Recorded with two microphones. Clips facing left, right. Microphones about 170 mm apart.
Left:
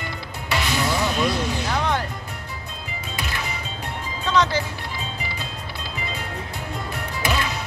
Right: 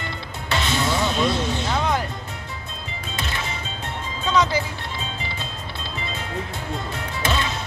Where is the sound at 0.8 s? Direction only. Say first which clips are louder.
Right 1 dB; 25° right (ahead or behind).